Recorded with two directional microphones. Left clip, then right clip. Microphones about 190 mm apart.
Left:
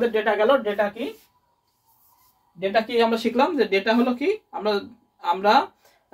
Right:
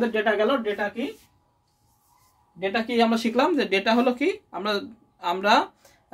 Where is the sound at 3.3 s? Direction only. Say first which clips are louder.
Left 1 dB; 45° right (ahead or behind).